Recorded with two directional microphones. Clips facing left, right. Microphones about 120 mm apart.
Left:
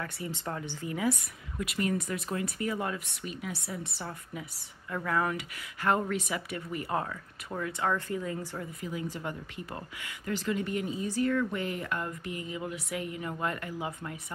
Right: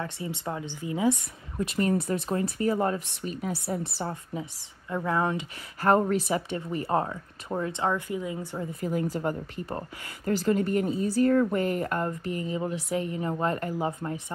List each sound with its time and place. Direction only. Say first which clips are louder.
0.0 s speech: right 3 dB; 20° right (ahead or behind)
1.6 s speech: right 5 dB; 35° right (ahead or behind)
5.8 s speech: right 6 dB; 40° right (ahead or behind); by 8.6 s 15° right (ahead or behind)
8.8 s speech: right 9 dB; 45° right (ahead or behind)